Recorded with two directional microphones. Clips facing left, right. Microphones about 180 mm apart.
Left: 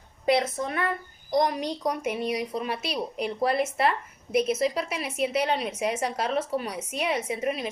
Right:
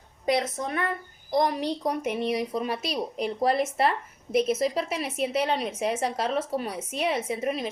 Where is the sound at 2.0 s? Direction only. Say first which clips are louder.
Right 1 dB; 10° left (ahead or behind).